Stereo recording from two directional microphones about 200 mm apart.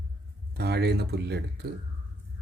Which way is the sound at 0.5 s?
55° right (ahead or behind).